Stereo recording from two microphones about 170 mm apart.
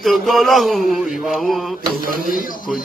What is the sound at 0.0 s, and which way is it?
Music, centre (ahead or behind).